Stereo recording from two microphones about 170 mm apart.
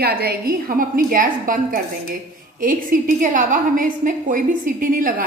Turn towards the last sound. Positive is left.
turn(degrees=-55)  # may be behind; listen again after turning